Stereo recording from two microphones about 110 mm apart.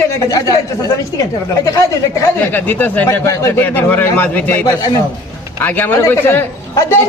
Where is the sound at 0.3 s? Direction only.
30° left (ahead or behind).